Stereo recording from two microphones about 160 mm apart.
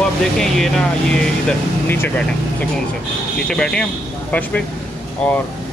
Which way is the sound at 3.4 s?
5° left (ahead or behind).